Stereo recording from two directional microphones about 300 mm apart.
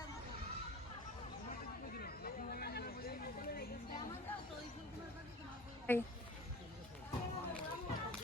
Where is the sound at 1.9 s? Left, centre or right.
Left.